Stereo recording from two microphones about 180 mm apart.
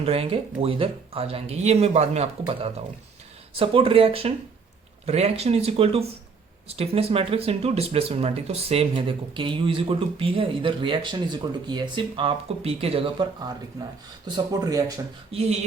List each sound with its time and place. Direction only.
0.0 s speech: 30° right (ahead or behind)
15.3 s speech: 35° right (ahead or behind)